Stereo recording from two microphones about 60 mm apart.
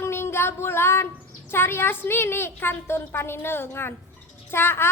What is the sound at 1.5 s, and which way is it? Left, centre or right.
A woman's voice, left.